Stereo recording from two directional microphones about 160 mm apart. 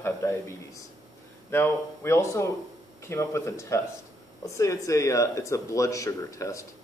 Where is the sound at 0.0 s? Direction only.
15° left (ahead or behind).